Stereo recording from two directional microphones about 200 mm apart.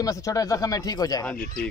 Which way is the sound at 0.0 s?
15° left (ahead or behind).